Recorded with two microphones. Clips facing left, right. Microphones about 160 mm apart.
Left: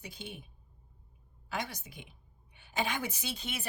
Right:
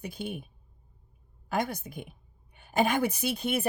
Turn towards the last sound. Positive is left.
turn(degrees=-55)  # may be behind; listen again after turning